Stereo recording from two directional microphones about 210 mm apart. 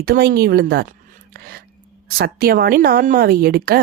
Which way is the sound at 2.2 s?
45° right (ahead or behind).